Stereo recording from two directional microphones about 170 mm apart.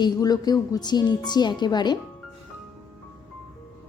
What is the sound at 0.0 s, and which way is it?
A woman's voice, 25° left (ahead or behind).